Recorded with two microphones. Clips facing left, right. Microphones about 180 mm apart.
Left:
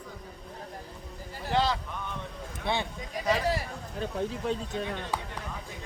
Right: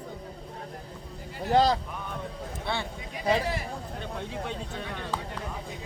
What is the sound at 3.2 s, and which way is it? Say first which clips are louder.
Speech: right 2 dB; 30° right (ahead or behind).